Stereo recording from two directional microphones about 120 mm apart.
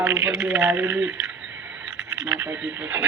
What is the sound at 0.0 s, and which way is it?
A man's voice, 20° right (ahead or behind).